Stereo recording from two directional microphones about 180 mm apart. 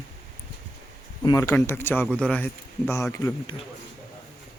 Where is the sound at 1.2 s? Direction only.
20° left (ahead or behind).